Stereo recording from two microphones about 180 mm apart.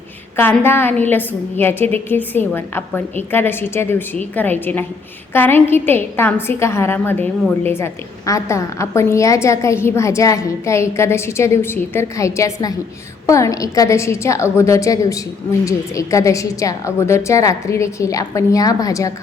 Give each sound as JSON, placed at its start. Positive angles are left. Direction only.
{"t": 0.3, "sound": "a woman's voice", "side_deg": 10}